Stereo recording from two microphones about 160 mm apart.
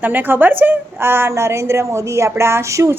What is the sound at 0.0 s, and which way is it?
A woman's voice, 10° right (ahead or behind).